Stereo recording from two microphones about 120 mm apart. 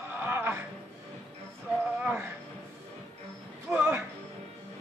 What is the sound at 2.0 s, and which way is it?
Music, 15° right (ahead or behind).